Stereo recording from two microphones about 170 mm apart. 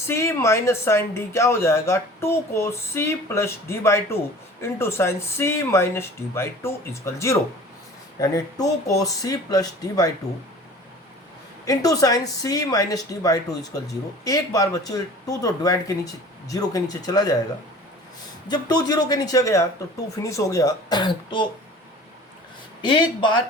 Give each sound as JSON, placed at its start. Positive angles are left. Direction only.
{"t": 0.1, "sound": "speech", "side_deg": 15}
{"t": 11.6, "sound": "speech", "side_deg": 20}
{"t": 18.4, "sound": "speech", "side_deg": 25}
{"t": 22.8, "sound": "speech", "side_deg": 25}